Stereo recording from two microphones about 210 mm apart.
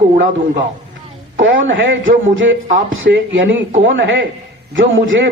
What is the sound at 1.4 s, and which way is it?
Speech, 60° right (ahead or behind).